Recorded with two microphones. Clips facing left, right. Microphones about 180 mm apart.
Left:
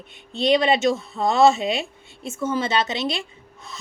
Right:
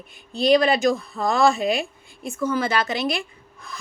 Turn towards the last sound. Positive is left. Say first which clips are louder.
# even
turn(degrees=25)  # may be behind; listen again after turning